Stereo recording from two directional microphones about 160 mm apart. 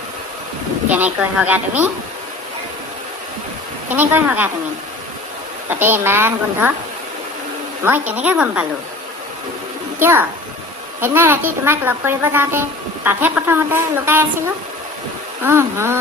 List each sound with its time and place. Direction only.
0.9 s a woman's voice: 10° right (ahead or behind)
3.8 s a woman's voice: 10° right (ahead or behind)
5.6 s a woman's voice: 15° right (ahead or behind)
7.9 s a woman's voice: 10° right (ahead or behind)
10.0 s a woman's voice: 15° right (ahead or behind)